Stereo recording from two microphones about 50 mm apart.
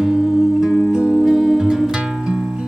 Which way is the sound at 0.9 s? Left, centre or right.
Centre.